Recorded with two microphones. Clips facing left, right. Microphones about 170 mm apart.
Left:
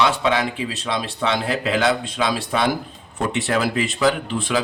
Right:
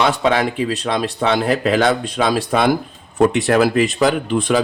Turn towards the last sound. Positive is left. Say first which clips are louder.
# right 6 dB
turn(degrees=-50)  # may be behind; listen again after turning